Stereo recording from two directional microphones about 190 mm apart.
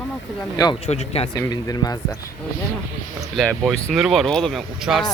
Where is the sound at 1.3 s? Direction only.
20° left (ahead or behind).